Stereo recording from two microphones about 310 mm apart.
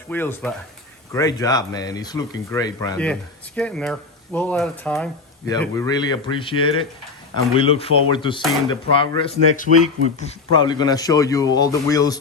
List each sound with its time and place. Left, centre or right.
0.1 s speech: centre